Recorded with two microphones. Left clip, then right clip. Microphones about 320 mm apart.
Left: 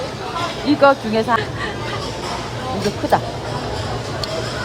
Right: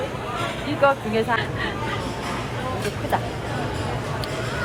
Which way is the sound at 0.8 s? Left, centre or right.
Left.